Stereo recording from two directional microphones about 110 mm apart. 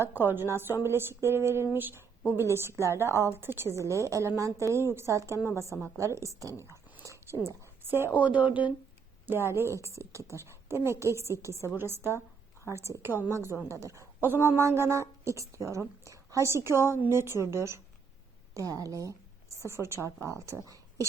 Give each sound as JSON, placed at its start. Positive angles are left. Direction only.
{"t": 0.0, "sound": "a woman's voice", "side_deg": -20}